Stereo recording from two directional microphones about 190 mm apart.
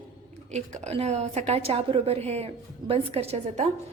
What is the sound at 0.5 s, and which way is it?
A woman's voice, 35° right (ahead or behind).